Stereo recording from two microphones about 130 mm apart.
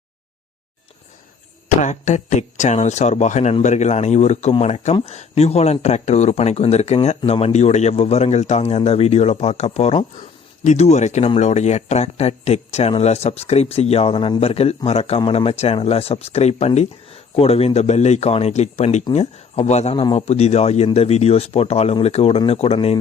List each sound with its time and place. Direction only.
1.8 s a man's voice: 65° left (ahead or behind); by 23.0 s 50° left (ahead or behind)